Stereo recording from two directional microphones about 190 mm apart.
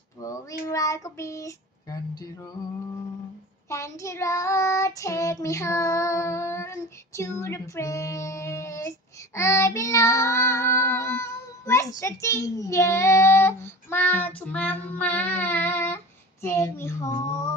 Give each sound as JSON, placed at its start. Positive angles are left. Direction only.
{"t": 0.7, "sound": "child singing", "side_deg": 15}
{"t": 3.7, "sound": "child singing", "side_deg": 15}